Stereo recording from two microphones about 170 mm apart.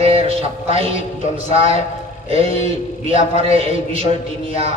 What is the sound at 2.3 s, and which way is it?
A man's voice, 35° right (ahead or behind).